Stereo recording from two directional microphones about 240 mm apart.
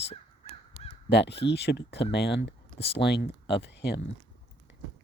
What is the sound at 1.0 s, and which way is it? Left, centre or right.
Speech, left.